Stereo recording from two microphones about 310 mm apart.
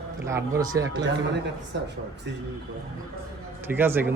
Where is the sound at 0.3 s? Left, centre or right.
Centre.